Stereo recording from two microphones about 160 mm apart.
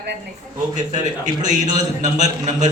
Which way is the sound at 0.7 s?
50° right (ahead or behind).